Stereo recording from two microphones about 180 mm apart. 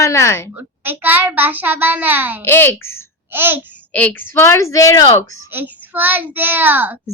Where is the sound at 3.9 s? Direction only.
10° left (ahead or behind).